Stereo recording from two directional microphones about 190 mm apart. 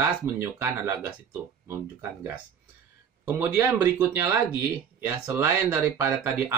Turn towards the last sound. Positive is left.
turn(degrees=-10)  # may be behind; listen again after turning